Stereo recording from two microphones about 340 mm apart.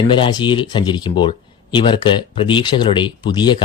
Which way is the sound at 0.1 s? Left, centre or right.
Centre.